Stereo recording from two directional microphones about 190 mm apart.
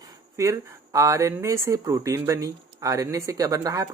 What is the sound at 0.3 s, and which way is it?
Speech, 15° right (ahead or behind).